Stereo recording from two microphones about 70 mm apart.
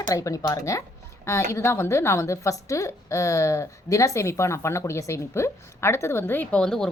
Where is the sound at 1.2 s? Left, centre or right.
Left.